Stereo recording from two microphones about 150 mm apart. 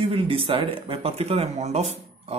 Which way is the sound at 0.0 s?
35° right (ahead or behind).